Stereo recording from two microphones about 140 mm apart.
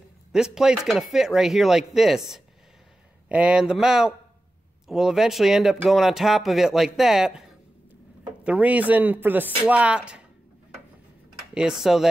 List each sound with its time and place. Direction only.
0.3 s speech: 5° right (ahead or behind)
8.5 s speech: 10° right (ahead or behind)
11.5 s speech: 5° right (ahead or behind)